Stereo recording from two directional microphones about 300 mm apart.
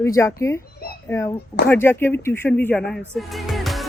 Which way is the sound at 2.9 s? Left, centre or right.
Centre.